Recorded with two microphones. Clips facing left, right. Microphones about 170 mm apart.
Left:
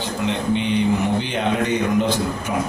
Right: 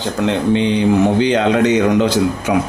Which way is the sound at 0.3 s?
90° right.